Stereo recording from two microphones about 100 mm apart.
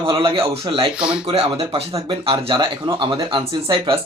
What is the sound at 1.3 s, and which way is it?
Speech, 80° right.